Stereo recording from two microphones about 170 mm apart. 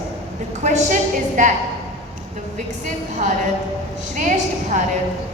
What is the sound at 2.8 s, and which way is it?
A woman's voice, 45° right (ahead or behind).